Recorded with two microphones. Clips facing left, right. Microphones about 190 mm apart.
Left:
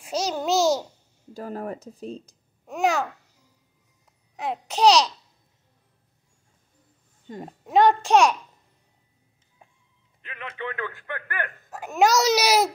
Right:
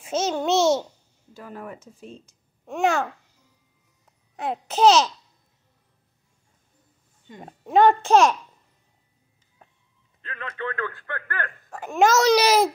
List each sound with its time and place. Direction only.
0.0 s a child's voice: centre (ahead or behind)
1.3 s speech: 40° left (ahead or behind)
2.6 s a child's voice: centre (ahead or behind)
4.4 s a child's voice: centre (ahead or behind)
7.4 s a child's voice: centre (ahead or behind)
10.2 s speech: 20° left (ahead or behind)
11.7 s a child's voice: 5° left (ahead or behind)